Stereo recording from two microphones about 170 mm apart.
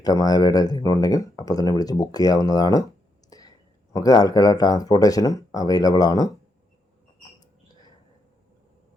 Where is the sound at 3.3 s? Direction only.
20° left (ahead or behind).